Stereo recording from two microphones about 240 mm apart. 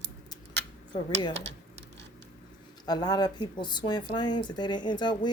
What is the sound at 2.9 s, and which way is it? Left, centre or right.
Speech, centre.